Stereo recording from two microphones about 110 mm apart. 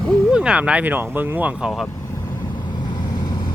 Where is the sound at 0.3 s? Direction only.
10° right (ahead or behind).